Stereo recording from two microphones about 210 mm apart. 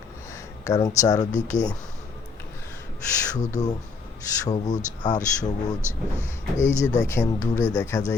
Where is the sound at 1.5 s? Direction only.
35° left (ahead or behind).